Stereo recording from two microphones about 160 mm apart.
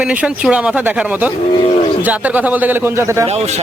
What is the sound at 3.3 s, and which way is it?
Speech, 40° right (ahead or behind).